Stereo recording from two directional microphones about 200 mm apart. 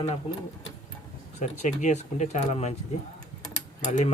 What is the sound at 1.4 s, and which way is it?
Speech, 35° left (ahead or behind).